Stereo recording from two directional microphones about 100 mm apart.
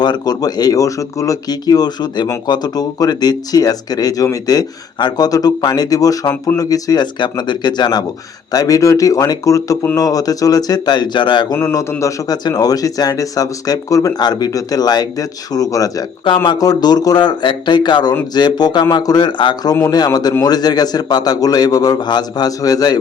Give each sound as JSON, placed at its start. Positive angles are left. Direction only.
{"t": 0.0, "sound": "speech", "side_deg": 45}
{"t": 11.5, "sound": "speech", "side_deg": 30}
{"t": 16.2, "sound": "speech", "side_deg": 50}